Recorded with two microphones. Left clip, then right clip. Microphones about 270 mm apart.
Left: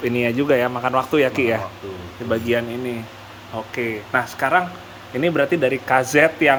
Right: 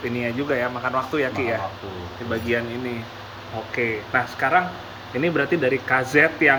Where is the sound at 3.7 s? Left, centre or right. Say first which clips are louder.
Even; left.